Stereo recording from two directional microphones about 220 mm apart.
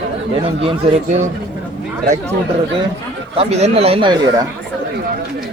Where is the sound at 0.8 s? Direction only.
25° right (ahead or behind).